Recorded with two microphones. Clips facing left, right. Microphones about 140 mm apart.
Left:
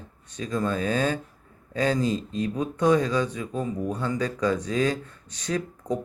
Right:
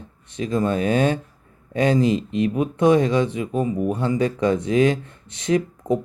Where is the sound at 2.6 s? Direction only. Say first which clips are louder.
Right 4 dB; 20° right (ahead or behind).